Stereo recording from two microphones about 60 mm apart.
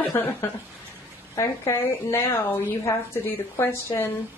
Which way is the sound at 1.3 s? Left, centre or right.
Left.